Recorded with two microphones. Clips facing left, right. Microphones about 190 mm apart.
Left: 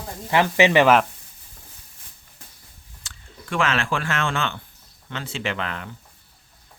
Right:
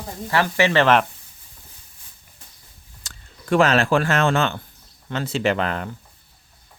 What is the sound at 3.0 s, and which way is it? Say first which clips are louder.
Speech: left 1 dB; 40° right (ahead or behind).